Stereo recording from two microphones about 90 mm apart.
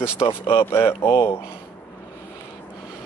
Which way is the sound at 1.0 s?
55° left (ahead or behind).